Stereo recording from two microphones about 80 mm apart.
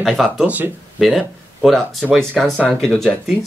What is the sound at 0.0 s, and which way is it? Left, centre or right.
Speech, centre.